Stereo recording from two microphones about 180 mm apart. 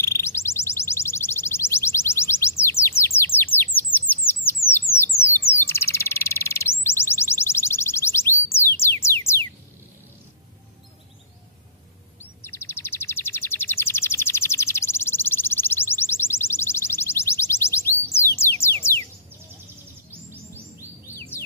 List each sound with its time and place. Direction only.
0.0 s music: 15° left (ahead or behind)
3.2 s chirp: 10° left (ahead or behind)
4.6 s bird: 15° left (ahead or behind)
6.8 s music: 15° left (ahead or behind)
12.2 s chirp: 15° left (ahead or behind)
18.4 s a sound: 15° left (ahead or behind)